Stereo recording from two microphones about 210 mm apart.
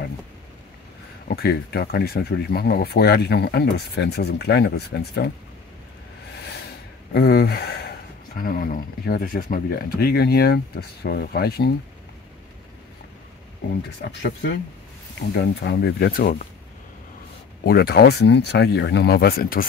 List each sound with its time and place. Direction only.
1.3 s speech: 50° left (ahead or behind)
7.2 s speech: 50° left (ahead or behind)
15.3 s speech: 50° left (ahead or behind)
17.6 s speech: 50° left (ahead or behind)